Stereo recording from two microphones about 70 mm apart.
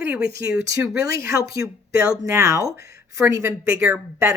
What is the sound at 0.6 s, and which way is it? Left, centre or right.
Speech, right.